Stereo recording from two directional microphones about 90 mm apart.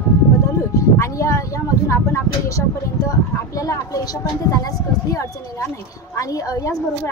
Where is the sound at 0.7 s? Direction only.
35° left (ahead or behind).